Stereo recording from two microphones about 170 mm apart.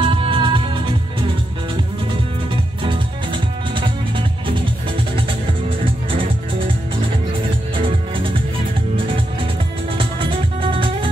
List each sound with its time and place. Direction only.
0.0 s music: 30° right (ahead or behind)
2.5 s music: 30° right (ahead or behind)
7.7 s music: 30° right (ahead or behind)
9.9 s music: 30° right (ahead or behind)